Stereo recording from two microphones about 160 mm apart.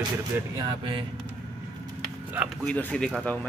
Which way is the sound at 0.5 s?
30° right (ahead or behind).